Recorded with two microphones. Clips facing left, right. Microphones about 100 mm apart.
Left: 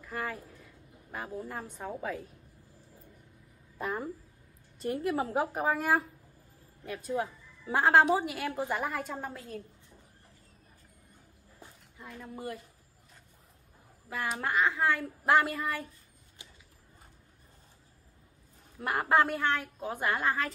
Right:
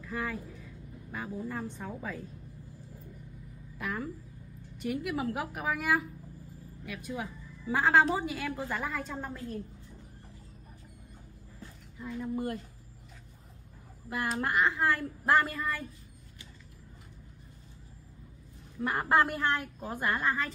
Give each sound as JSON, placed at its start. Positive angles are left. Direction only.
{"t": 0.0, "sound": "a woman's voice", "side_deg": 5}
{"t": 3.7, "sound": "a woman's voice", "side_deg": 30}
{"t": 7.7, "sound": "a woman's voice", "side_deg": 20}
{"t": 12.1, "sound": "a woman's voice", "side_deg": 0}
{"t": 14.0, "sound": "a woman's voice", "side_deg": 0}
{"t": 18.8, "sound": "a woman's voice", "side_deg": 5}